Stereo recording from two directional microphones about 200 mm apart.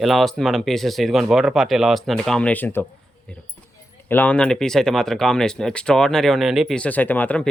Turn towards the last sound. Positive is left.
turn(degrees=5)  # may be behind; listen again after turning